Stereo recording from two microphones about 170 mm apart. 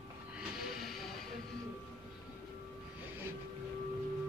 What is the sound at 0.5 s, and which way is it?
Train, centre (ahead or behind).